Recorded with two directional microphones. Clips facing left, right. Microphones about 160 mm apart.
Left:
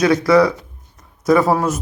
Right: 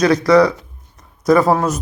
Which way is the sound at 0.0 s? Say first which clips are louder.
Right 1 dB; 5° left (ahead or behind).